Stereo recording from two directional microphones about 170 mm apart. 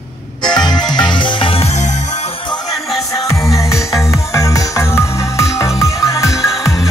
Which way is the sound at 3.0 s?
20° left (ahead or behind).